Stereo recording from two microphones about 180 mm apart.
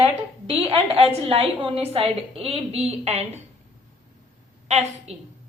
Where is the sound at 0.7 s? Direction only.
30° right (ahead or behind).